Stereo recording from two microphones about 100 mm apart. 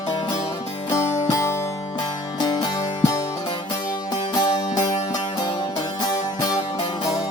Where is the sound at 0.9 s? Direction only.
30° left (ahead or behind).